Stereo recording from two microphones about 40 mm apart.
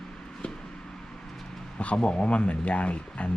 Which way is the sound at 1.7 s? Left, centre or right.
Left.